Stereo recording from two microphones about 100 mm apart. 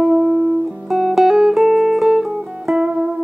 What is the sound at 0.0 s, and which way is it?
Music, 5° right (ahead or behind).